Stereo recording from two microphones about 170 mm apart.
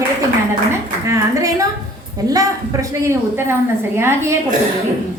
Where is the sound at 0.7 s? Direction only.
15° right (ahead or behind).